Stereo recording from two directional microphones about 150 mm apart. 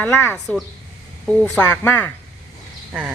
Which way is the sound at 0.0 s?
15° left (ahead or behind).